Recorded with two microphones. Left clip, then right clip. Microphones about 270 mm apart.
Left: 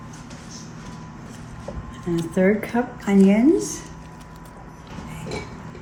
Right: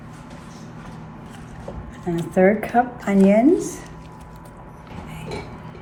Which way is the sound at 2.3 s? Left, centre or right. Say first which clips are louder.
Right 5 dB; right.